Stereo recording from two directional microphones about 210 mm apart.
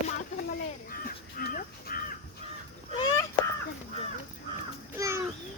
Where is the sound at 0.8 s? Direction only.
40° left (ahead or behind).